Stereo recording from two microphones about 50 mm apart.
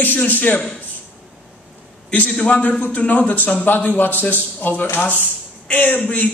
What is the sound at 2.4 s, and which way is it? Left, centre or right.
A man's voice, left.